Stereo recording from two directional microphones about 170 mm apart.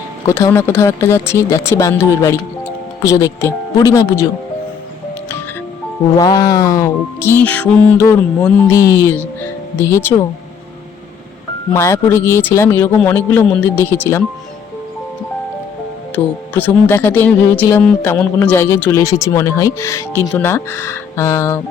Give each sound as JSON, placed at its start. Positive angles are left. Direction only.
{"t": 0.3, "sound": "speech", "side_deg": 15}
{"t": 6.1, "sound": "speech", "side_deg": 20}
{"t": 11.7, "sound": "speech", "side_deg": 15}
{"t": 16.1, "sound": "speech", "side_deg": 10}